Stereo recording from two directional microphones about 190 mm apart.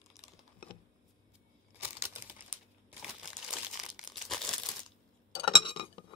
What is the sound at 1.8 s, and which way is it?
Crumpling, 10° right (ahead or behind).